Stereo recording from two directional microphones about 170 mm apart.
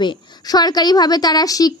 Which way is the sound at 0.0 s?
25° left (ahead or behind).